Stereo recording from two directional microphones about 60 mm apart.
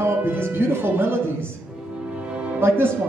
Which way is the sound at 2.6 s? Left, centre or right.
Right.